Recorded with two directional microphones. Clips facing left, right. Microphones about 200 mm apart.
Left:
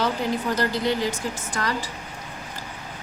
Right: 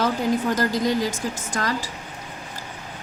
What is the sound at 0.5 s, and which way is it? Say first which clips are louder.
Speech: right 2 dB; 45° right (ahead or behind).